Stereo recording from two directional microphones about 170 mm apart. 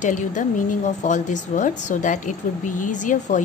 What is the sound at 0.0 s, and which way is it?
A woman's voice, 50° left (ahead or behind).